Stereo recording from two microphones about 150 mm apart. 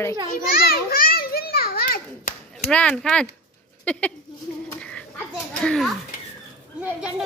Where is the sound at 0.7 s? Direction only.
80° left.